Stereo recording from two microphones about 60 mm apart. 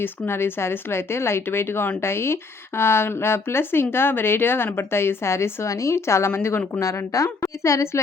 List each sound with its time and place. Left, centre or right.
0.3 s speech: left
6.7 s a woman's voice: left